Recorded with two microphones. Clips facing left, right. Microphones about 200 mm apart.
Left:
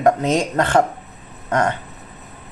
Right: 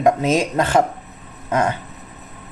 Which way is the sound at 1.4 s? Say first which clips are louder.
Even; 10° right (ahead or behind).